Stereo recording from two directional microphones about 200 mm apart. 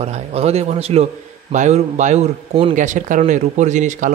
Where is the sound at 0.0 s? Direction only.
30° right (ahead or behind).